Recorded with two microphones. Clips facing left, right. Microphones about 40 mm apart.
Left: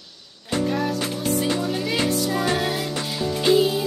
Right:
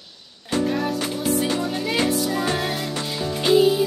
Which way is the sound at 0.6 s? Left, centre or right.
Centre.